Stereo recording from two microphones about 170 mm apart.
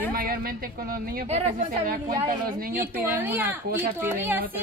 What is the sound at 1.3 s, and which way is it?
Speech, 40° right (ahead or behind).